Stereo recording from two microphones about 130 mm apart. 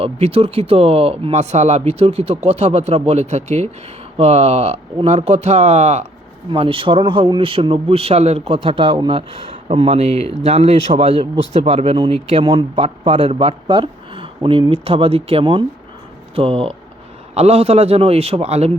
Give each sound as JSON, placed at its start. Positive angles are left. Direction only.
{"t": 0.0, "sound": "speech", "side_deg": -50}
{"t": 6.5, "sound": "speech", "side_deg": -45}